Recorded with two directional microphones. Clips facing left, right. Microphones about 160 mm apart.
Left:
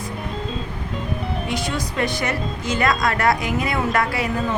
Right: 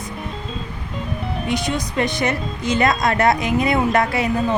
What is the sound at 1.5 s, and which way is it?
A woman's voice, 20° right (ahead or behind).